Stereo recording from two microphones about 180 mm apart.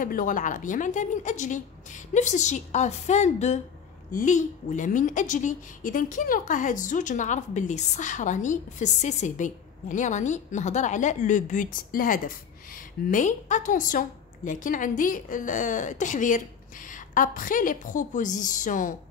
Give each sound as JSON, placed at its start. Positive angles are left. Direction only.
{"t": 0.0, "sound": "a woman's voice", "side_deg": 50}